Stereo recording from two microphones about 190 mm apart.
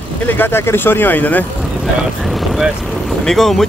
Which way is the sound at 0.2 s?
10° left (ahead or behind).